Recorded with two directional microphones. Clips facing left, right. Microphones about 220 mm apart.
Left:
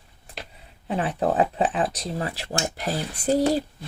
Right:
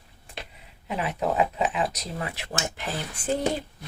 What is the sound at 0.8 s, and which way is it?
Speech, 35° left (ahead or behind).